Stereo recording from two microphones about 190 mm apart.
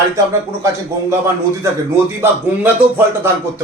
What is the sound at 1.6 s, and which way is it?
Speech, 15° right (ahead or behind).